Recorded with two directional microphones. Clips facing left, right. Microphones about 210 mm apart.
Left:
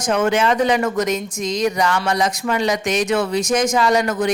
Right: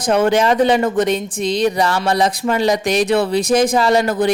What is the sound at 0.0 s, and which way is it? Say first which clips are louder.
Speech: right 3 dB; 35° right (ahead or behind).